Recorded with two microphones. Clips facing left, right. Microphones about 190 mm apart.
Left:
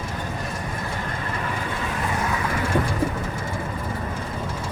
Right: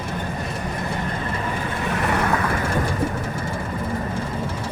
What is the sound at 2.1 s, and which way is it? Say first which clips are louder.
Vehicle: right 6 dB; 70° right (ahead or behind).